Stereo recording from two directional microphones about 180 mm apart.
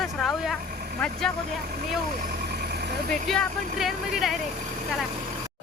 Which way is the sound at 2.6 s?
65° right (ahead or behind).